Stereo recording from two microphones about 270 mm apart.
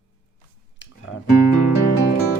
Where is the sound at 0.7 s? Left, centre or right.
Left.